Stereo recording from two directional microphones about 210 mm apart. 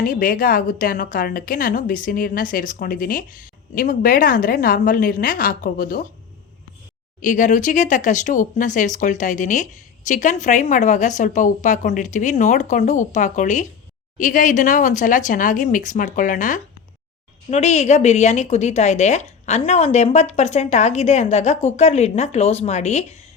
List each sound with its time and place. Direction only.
0.0 s speech: 40° left (ahead or behind)
7.2 s speech: 40° left (ahead or behind)